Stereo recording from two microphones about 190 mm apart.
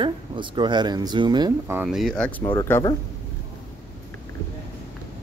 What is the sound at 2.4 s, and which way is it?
Speech, 15° left (ahead or behind).